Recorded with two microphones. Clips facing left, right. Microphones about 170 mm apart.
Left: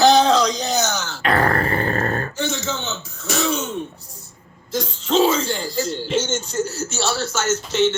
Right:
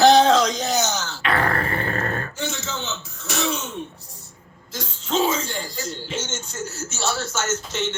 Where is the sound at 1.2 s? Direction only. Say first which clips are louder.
Left 4 dB; 40° left (ahead or behind).